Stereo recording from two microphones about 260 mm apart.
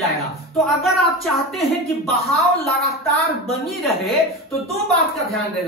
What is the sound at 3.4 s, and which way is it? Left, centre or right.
Speech, centre.